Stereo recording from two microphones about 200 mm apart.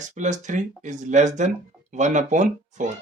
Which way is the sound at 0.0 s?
35° right (ahead or behind).